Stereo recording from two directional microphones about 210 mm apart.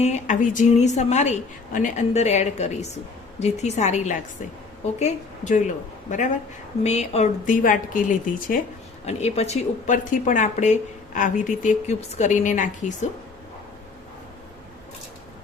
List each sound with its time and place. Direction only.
0.0 s speech: 35° left (ahead or behind)